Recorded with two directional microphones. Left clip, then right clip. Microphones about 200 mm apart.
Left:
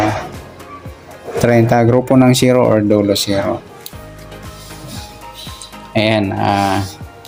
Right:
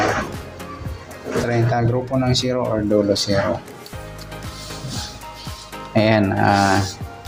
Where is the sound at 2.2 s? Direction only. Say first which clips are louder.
Left 9 dB; 70° left (ahead or behind).